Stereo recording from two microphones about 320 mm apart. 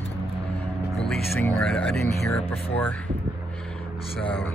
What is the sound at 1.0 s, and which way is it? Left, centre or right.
Speech, centre.